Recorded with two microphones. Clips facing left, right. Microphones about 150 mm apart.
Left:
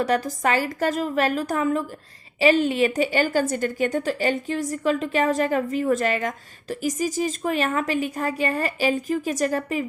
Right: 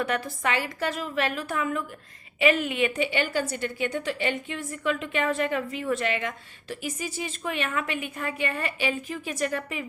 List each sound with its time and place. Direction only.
0.0 s a woman's voice: 40° left (ahead or behind)